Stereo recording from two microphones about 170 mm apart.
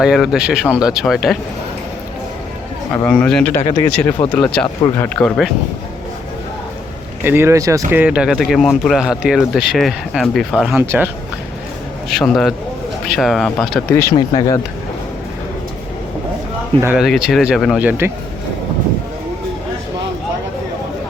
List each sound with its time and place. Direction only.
0.0 s speech: 5° right (ahead or behind)
2.9 s a man's voice: 10° left (ahead or behind)
7.3 s speech: 15° right (ahead or behind); by 10.8 s centre (ahead or behind)
10.8 s speech: 10° right (ahead or behind)
12.0 s speech: centre (ahead or behind)
14.3 s speech: 25° left (ahead or behind)
16.8 s speech: 5° right (ahead or behind)
17.7 s speech: 10° right (ahead or behind)